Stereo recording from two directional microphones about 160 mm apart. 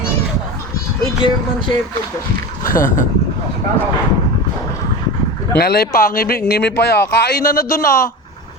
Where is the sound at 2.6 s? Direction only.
60° left (ahead or behind).